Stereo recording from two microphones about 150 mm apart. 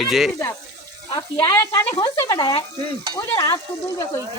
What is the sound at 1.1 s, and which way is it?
Speech, 20° left (ahead or behind).